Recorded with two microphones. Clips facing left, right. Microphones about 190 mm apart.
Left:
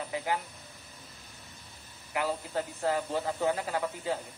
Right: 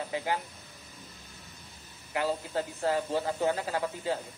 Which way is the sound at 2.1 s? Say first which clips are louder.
Right 1 dB; 30° right (ahead or behind).